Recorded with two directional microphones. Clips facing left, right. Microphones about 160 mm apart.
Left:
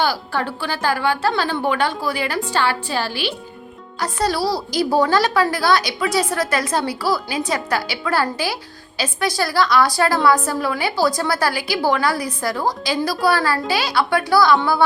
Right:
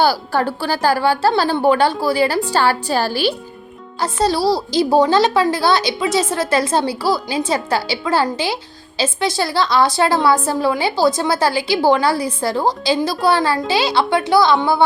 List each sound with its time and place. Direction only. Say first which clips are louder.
0.0 s a woman's voice: right 5 dB; 40° right (ahead or behind)
4.0 s a woman's voice: right 4 dB; 25° right (ahead or behind)